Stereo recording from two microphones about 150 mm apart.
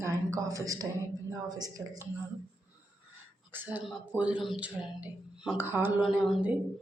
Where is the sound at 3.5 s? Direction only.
10° right (ahead or behind).